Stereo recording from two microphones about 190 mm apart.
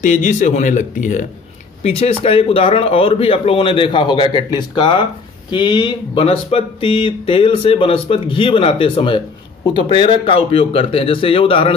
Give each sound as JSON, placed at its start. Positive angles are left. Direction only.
{"t": 0.0, "sound": "speech", "side_deg": 40}